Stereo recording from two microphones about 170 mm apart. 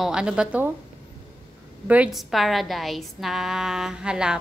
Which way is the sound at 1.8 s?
5° right (ahead or behind).